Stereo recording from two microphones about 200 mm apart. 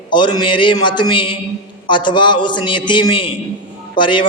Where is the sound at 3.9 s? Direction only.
25° left (ahead or behind).